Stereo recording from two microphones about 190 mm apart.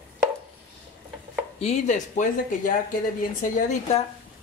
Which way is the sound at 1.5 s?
35° left (ahead or behind).